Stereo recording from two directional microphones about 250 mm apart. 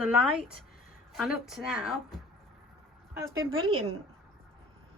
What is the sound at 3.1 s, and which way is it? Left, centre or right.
Speech, centre.